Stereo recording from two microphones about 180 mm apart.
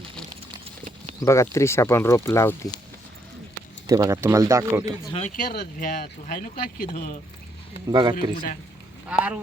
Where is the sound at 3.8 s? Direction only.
20° right (ahead or behind).